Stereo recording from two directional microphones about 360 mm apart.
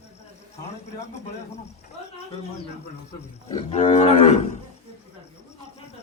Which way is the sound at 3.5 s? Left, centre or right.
Centre.